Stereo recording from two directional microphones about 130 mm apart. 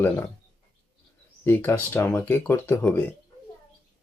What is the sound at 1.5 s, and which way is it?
Speech, 15° left (ahead or behind).